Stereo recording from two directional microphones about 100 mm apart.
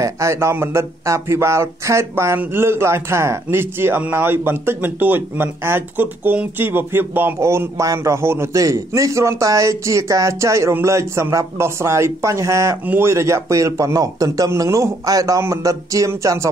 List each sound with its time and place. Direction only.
0.0 s a man's voice: 30° right (ahead or behind)